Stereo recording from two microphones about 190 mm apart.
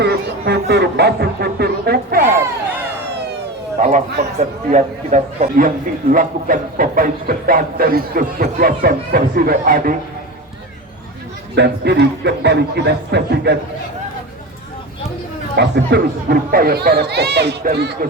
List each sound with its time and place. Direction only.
0.0 s chatter: 60° right (ahead or behind)
3.8 s a man's voice: 40° right (ahead or behind)
11.5 s speech: 60° right (ahead or behind)
15.5 s speech: 60° right (ahead or behind)